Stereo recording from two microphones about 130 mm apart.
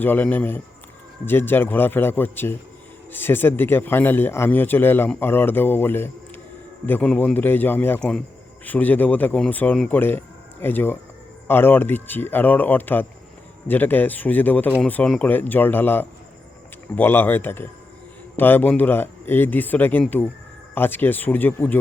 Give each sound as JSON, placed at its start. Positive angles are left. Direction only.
{"t": 0.0, "sound": "a man's voice", "side_deg": 15}